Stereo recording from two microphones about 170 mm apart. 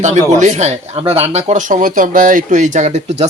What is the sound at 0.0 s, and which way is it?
Speech, 45° right (ahead or behind).